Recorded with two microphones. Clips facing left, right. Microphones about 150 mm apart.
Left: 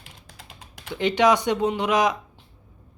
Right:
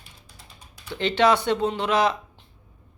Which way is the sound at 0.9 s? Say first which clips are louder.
Left 1 dB; 15° left (ahead or behind).